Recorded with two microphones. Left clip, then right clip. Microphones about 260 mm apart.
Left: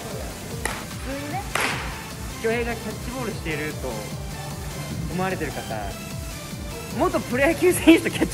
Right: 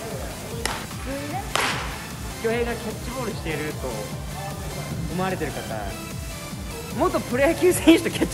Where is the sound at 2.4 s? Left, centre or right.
Centre.